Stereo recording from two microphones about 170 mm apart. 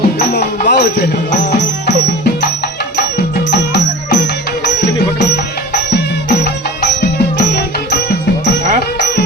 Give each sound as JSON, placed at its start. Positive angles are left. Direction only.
{"t": 0.7, "sound": "music", "side_deg": 75}
{"t": 3.5, "sound": "music", "side_deg": 70}
{"t": 5.9, "sound": "music", "side_deg": 80}